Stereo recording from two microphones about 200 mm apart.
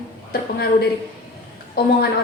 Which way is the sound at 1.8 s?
50° left (ahead or behind).